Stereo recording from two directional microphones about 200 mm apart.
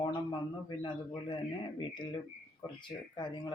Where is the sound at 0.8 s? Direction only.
25° left (ahead or behind).